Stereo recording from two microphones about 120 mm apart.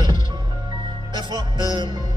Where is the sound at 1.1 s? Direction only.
40° right (ahead or behind).